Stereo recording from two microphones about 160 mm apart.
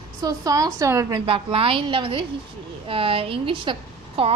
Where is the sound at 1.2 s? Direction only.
35° right (ahead or behind).